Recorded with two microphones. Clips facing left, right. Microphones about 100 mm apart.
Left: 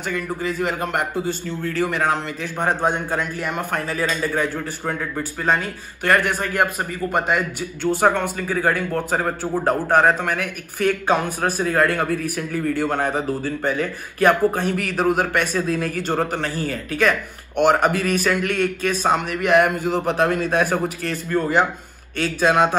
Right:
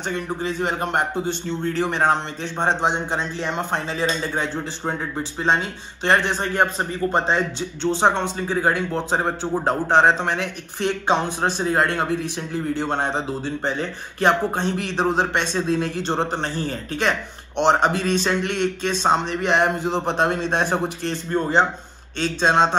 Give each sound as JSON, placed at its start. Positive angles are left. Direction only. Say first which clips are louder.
{"t": 0.1, "sound": "speech", "louder": "left 2 dB", "side_deg": -30}